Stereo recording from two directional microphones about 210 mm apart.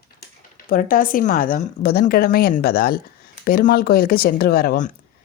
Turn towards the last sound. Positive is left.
turn(degrees=40)  # may be behind; listen again after turning